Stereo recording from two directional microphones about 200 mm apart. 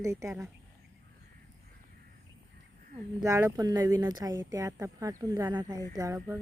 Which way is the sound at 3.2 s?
15° right (ahead or behind).